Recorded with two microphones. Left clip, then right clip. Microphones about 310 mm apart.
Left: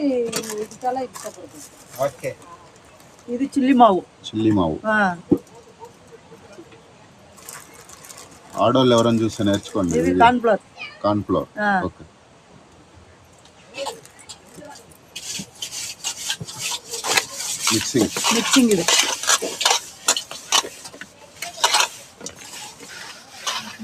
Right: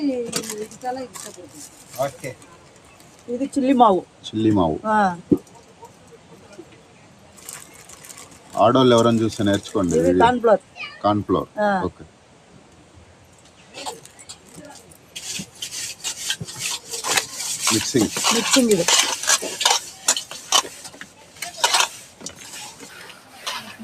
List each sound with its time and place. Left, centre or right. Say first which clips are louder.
0.1 s speech: left 3 dB; centre
3.3 s speech: left 1 dB; left
4.2 s speech: right 1 dB; centre
4.8 s speech: even; left
7.4 s a sound: even; centre
10.2 s speech: left 2 dB; left
10.8 s speech: right 1 dB; centre
11.5 s speech: even; left
13.8 s a sound: left 1 dB; centre